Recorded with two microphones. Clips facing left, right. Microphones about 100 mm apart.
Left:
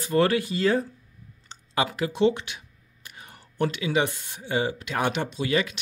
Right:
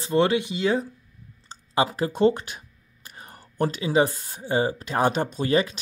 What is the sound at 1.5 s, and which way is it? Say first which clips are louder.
Speech: right 3 dB; 35° right (ahead or behind).